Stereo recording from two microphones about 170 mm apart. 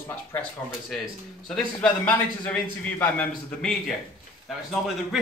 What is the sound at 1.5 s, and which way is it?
Speech, 5° left (ahead or behind).